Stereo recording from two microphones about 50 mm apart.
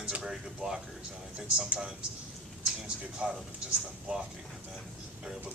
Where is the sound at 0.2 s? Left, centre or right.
Centre.